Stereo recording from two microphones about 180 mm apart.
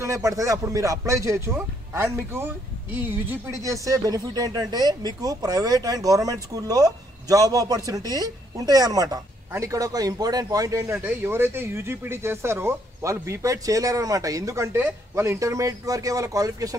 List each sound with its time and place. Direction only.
0.0 s speech: 15° right (ahead or behind)